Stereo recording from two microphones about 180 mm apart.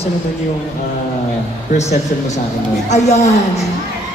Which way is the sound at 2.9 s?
40° left (ahead or behind).